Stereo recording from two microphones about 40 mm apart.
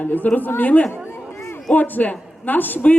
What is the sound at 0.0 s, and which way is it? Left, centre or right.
A woman's voice, left.